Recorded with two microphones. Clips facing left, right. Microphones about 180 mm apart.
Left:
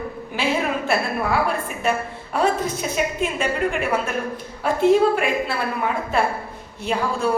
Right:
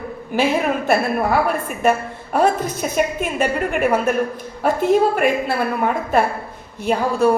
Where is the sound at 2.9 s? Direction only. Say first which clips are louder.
Right 5 dB; 55° right (ahead or behind).